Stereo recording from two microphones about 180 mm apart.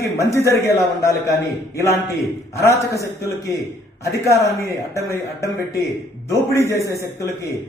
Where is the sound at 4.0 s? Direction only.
15° left (ahead or behind).